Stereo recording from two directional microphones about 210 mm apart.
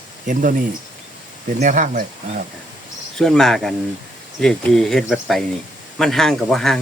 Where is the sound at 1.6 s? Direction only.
35° right (ahead or behind).